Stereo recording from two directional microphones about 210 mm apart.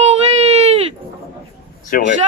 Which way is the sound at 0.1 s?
30° right (ahead or behind).